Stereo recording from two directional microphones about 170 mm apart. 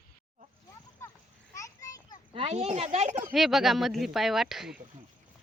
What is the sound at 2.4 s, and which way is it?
Speech, 40° right (ahead or behind).